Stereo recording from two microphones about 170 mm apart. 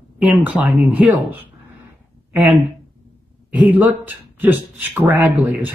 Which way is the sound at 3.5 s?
10° right (ahead or behind).